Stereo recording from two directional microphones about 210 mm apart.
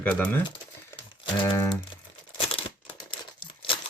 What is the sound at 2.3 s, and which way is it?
Crumpling, 25° left (ahead or behind).